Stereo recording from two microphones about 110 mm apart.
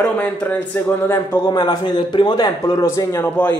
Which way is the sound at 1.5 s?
40° left (ahead or behind).